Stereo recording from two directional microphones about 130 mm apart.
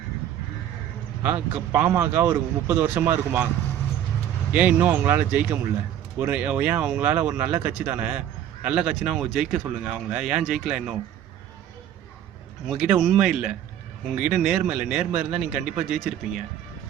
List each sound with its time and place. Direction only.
1.2 s a man's voice: 15° right (ahead or behind)
4.5 s a man's voice: 10° right (ahead or behind)
12.6 s a man's voice: 5° right (ahead or behind)